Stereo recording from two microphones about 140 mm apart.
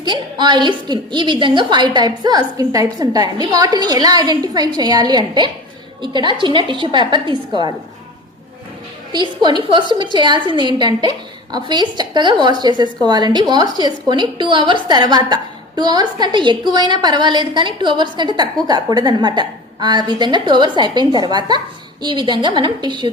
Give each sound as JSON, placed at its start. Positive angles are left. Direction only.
{"t": 0.0, "sound": "a woman's voice", "side_deg": -30}
{"t": 9.1, "sound": "speech", "side_deg": -30}